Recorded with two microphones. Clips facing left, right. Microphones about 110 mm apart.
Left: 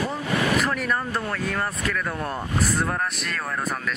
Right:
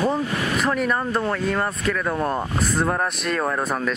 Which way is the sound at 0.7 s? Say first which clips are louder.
Right 4 dB; 25° right (ahead or behind).